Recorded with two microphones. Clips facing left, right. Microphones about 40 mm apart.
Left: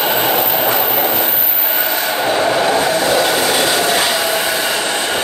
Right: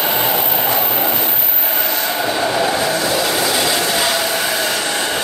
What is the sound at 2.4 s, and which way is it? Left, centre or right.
Vehicle, centre.